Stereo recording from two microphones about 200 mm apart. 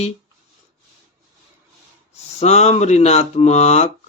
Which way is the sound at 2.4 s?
35° left (ahead or behind).